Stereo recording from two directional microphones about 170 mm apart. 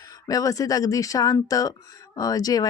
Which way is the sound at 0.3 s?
20° left (ahead or behind).